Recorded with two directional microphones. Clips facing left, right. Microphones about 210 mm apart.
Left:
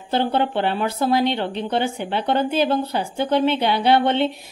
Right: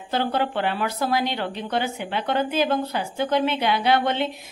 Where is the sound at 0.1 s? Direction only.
30° left (ahead or behind).